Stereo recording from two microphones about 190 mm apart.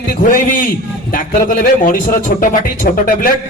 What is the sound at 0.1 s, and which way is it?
Speech, 45° left (ahead or behind).